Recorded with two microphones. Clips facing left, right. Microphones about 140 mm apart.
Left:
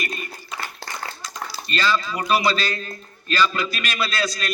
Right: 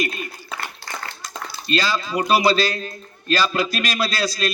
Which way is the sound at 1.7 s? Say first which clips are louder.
Right 1 dB; 35° right (ahead or behind).